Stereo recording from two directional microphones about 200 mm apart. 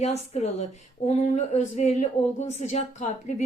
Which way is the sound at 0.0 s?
35° left (ahead or behind).